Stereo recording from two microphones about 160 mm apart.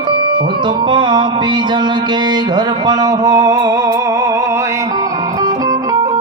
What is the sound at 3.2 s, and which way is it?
Music, 20° right (ahead or behind).